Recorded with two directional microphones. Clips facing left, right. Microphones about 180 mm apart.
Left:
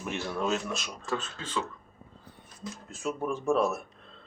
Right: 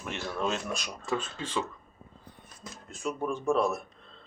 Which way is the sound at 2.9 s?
5° left (ahead or behind).